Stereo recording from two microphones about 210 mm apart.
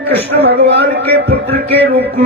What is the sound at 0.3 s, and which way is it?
Speech, 50° right (ahead or behind).